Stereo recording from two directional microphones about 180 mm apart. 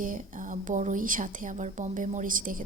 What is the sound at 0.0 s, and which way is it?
Speech, 45° right (ahead or behind).